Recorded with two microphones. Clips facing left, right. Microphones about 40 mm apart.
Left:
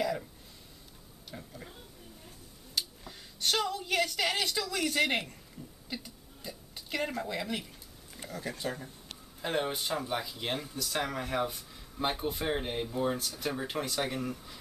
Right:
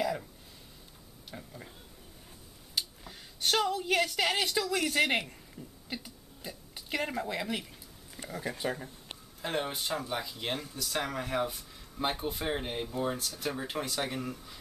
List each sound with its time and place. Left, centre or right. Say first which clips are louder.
0.0 s a sound: even; centre
1.3 s speech: even; centre
2.8 s a woman's voice: even; centre
5.6 s a sound: even; centre
5.9 s speech: left 2 dB; centre
9.4 s speech: left 1 dB; centre